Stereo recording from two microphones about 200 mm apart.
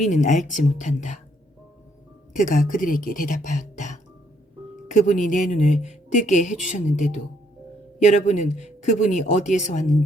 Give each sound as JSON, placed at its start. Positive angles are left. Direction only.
{"t": 0.0, "sound": "speech", "side_deg": 40}
{"t": 2.3, "sound": "speech", "side_deg": 40}